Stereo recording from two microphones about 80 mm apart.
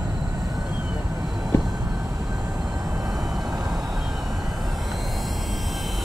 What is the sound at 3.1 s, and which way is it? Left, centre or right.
Vehicle, centre.